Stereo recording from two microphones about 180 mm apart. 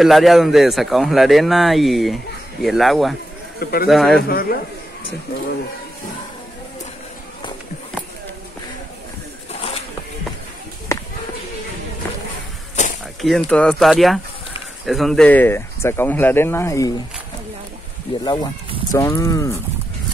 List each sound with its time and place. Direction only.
0.0 s a man's voice: centre (ahead or behind)
3.5 s speech: 55° left (ahead or behind)
3.9 s a man's voice: centre (ahead or behind)
4.2 s a man's voice: 55° left (ahead or behind)
9.5 s a sound: 35° left (ahead or behind)
10.9 s a sound: 15° left (ahead or behind)
12.8 s a sound: 40° left (ahead or behind)
13.2 s a man's voice: 5° left (ahead or behind)
18.2 s speech: 25° left (ahead or behind)